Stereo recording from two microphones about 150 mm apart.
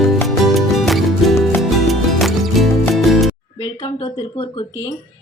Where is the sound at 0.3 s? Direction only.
Centre (ahead or behind).